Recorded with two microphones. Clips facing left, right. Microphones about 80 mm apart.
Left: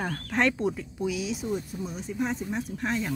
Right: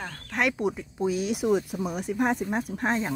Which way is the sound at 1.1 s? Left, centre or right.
Right.